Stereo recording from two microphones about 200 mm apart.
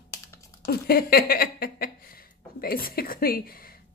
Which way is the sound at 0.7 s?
50° left (ahead or behind).